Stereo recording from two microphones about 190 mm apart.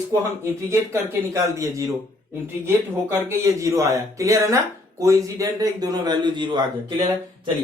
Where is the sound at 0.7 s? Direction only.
15° right (ahead or behind).